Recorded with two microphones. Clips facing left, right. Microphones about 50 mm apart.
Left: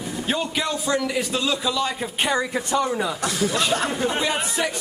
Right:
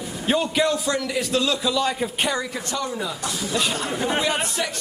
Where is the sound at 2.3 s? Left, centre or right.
Left.